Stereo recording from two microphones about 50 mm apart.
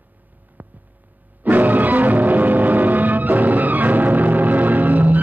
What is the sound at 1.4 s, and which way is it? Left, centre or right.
Music, right.